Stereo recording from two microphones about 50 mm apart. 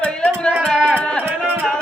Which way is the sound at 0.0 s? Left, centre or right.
Left.